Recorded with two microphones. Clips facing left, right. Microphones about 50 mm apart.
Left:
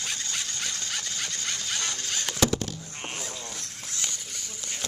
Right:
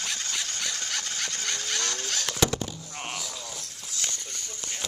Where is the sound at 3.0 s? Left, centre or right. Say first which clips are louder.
Right 1 dB; left.